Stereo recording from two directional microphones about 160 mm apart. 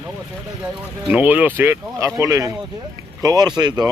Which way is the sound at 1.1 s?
10° right (ahead or behind).